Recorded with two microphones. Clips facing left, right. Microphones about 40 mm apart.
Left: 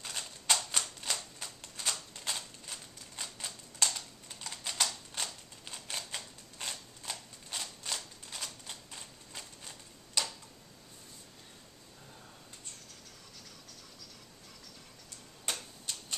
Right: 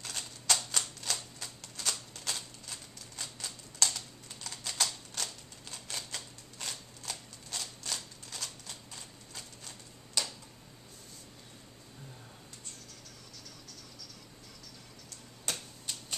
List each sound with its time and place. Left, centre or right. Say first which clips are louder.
0.0 s typewriter: even; centre
0.7 s typewriter: even; left
1.4 s shuffling cards: even; centre
15.5 s typewriter: left 1 dB; centre
15.9 s typewriter: even; centre